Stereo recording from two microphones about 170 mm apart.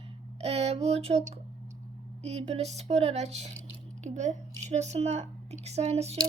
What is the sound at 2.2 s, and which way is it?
A woman's voice, 40° right (ahead or behind).